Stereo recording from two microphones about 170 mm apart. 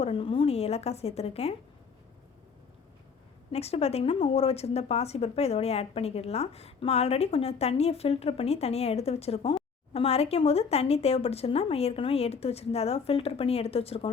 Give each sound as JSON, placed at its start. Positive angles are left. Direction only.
{"t": 0.0, "sound": "a woman's voice", "side_deg": 35}
{"t": 3.5, "sound": "a woman's voice", "side_deg": 35}